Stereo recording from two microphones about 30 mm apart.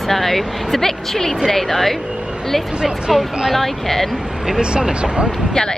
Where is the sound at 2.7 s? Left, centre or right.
Right.